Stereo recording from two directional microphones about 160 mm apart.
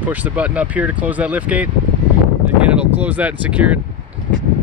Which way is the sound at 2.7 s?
10° right (ahead or behind).